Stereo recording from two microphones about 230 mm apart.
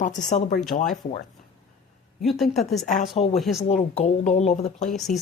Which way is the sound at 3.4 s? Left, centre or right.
Centre.